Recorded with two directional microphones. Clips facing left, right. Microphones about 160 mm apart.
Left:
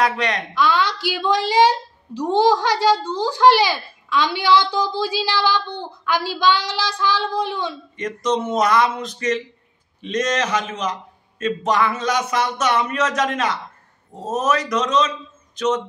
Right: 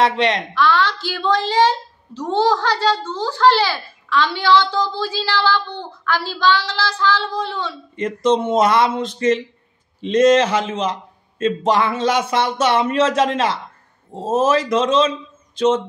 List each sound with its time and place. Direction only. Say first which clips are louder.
0.0 s a man's voice: right 4 dB; 25° right (ahead or behind)
0.6 s a woman's voice: even; 15° left (ahead or behind)
7.9 s a man's voice: right 6 dB; 30° right (ahead or behind)